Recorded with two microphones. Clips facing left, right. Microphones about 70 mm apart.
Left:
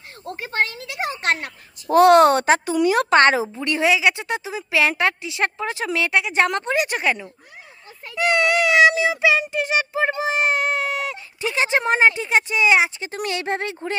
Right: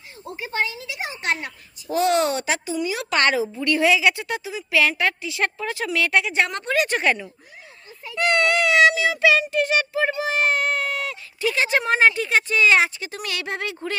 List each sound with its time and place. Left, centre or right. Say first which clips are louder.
0.3 s a sound: left 2 dB; left
2.7 s speech: left 8 dB; left
3.1 s a child's voice: left 5 dB; left; by 12.9 s centre
13.2 s speech: left 4 dB; left